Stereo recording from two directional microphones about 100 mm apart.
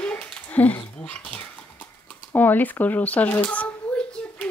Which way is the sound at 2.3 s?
20° left (ahead or behind).